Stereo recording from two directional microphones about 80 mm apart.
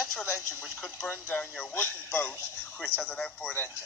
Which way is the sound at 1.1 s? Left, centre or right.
Left.